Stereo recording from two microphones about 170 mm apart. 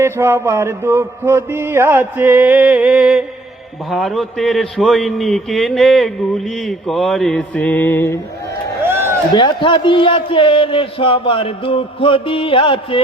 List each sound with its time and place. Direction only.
0.0 s mantra: 15° right (ahead or behind)
3.8 s a man's voice: centre (ahead or behind)
8.9 s a sound: 15° right (ahead or behind)
9.3 s speech: 30° left (ahead or behind)